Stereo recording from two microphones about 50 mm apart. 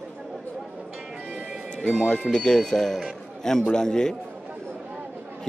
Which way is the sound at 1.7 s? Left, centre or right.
Centre.